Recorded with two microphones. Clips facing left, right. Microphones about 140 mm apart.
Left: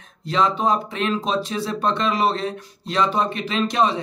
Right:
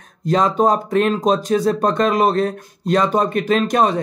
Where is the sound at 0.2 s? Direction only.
45° right (ahead or behind).